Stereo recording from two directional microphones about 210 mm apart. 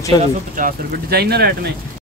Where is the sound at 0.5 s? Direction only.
45° right (ahead or behind).